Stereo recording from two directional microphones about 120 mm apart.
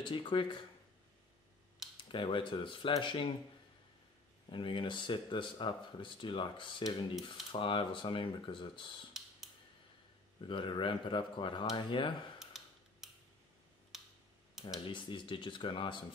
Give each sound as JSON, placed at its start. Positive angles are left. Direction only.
{"t": 0.0, "sound": "speech", "side_deg": 40}
{"t": 2.0, "sound": "speech", "side_deg": 45}
{"t": 4.5, "sound": "speech", "side_deg": 45}
{"t": 10.4, "sound": "speech", "side_deg": 45}
{"t": 12.4, "sound": "a sound", "side_deg": -5}
{"t": 13.9, "sound": "tick-tock", "side_deg": 0}
{"t": 14.9, "sound": "speech", "side_deg": 45}